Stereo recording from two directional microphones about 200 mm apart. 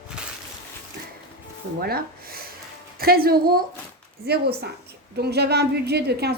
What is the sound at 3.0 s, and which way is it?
Speech, 50° right (ahead or behind).